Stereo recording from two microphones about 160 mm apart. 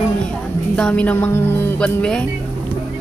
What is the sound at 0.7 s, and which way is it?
Speech, 5° left (ahead or behind).